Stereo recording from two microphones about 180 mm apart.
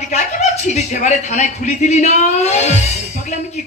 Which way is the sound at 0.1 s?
40° left (ahead or behind).